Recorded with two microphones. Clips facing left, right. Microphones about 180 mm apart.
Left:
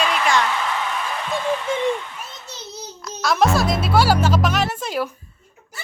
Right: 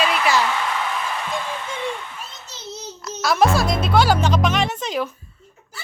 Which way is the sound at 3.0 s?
Centre (ahead or behind).